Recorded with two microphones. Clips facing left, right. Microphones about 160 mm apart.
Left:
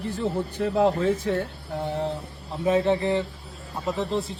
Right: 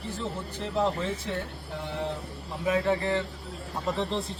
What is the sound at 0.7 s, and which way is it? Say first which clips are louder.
Speech: left 5 dB; 55° left (ahead or behind).